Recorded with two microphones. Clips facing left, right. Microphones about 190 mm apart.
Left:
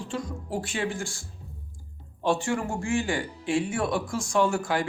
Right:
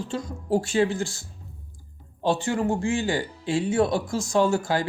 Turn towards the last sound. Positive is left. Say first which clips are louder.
# right 3 dB
turn(degrees=-35)  # may be behind; listen again after turning